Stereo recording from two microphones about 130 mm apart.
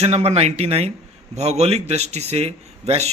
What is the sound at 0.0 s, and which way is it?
Speech, 55° right (ahead or behind).